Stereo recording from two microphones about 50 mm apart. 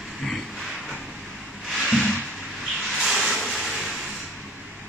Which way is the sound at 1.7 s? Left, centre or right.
Centre.